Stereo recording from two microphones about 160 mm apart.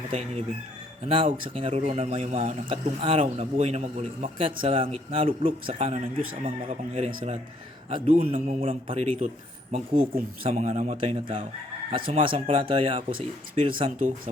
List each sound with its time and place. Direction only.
0.1 s a man's voice: 40° right (ahead or behind)
11.0 s a man's voice: 35° right (ahead or behind)